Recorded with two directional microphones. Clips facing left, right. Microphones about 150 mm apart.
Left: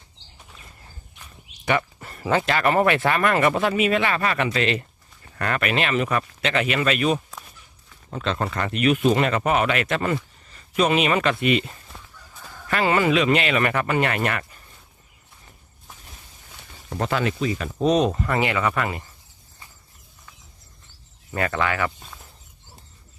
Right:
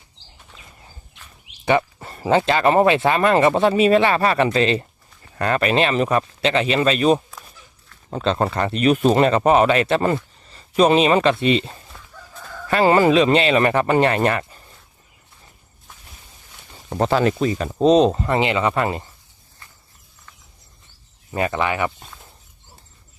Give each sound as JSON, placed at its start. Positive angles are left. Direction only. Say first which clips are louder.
{"t": 1.6, "sound": "speech", "louder": "right 5 dB", "side_deg": -25}
{"t": 16.9, "sound": "speech", "louder": "right 6 dB", "side_deg": -30}
{"t": 21.3, "sound": "speech", "louder": "right 2 dB", "side_deg": -20}